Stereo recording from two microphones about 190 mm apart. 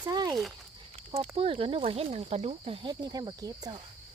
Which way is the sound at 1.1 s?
30° right (ahead or behind).